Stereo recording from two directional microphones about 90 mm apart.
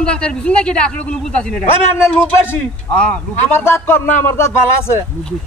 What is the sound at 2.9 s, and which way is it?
Speech, 10° left (ahead or behind).